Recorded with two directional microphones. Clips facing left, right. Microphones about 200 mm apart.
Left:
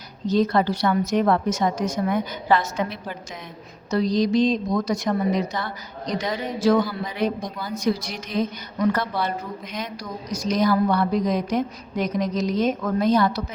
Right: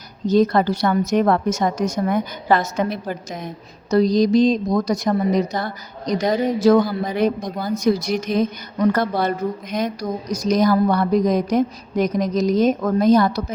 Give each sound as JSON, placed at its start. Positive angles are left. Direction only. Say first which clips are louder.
{"t": 0.3, "sound": "a woman's voice", "louder": "right 4 dB", "side_deg": -45}